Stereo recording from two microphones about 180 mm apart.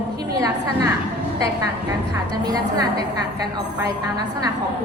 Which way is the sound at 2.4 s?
20° right (ahead or behind).